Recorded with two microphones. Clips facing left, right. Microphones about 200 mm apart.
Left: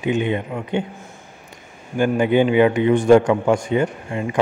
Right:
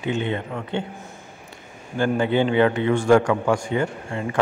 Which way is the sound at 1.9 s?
15° left (ahead or behind).